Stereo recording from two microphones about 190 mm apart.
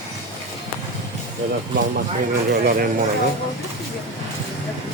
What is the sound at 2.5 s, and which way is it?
Speech, 50° right (ahead or behind).